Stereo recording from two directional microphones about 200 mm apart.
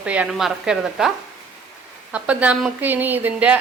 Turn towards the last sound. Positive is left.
turn(degrees=-10)  # may be behind; listen again after turning